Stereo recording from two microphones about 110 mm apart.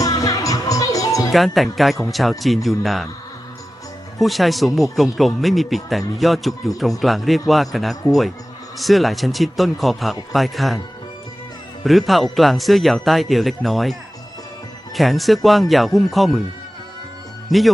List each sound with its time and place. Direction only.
0.0 s music: 30° left (ahead or behind)
1.3 s speech: centre (ahead or behind)
4.2 s speech: centre (ahead or behind)
11.8 s speech: centre (ahead or behind)
14.9 s speech: centre (ahead or behind)
17.5 s speech: centre (ahead or behind)